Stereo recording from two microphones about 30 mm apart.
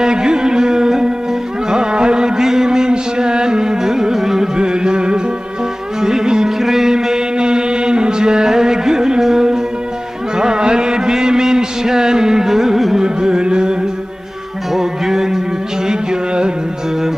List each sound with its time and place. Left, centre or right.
0.0 s music: right
4.5 s music: right
6.7 s mantra: centre
10.3 s music: right
12.9 s music: right
14.7 s music: centre
15.9 s music: right